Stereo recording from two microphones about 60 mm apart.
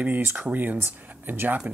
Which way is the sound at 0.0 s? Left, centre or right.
Right.